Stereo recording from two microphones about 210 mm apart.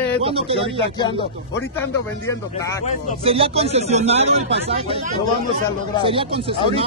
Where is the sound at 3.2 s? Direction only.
25° right (ahead or behind).